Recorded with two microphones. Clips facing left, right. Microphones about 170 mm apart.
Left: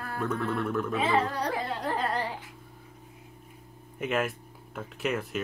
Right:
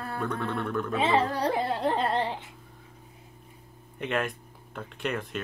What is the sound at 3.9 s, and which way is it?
Speech, 5° left (ahead or behind).